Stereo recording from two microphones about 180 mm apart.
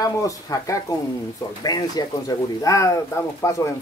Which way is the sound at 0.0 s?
20° left (ahead or behind).